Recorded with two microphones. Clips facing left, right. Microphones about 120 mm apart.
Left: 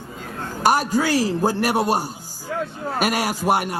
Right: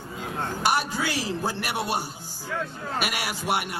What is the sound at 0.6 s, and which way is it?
A man's voice, 40° left (ahead or behind).